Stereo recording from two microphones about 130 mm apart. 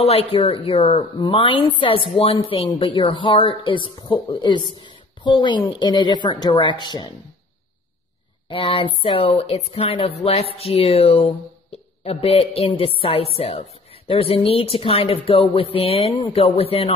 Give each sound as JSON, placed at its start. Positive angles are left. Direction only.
{"t": 0.0, "sound": "speech", "side_deg": 50}
{"t": 1.1, "sound": "speech", "side_deg": 40}
{"t": 8.5, "sound": "speech", "side_deg": 40}